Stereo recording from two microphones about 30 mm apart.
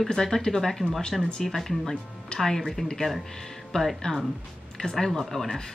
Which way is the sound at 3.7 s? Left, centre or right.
Left.